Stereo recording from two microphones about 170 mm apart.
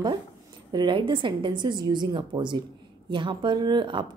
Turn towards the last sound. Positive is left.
turn(degrees=-25)  # may be behind; listen again after turning